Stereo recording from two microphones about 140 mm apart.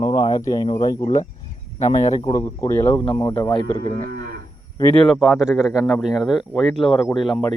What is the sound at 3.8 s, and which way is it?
Speech, 90° right.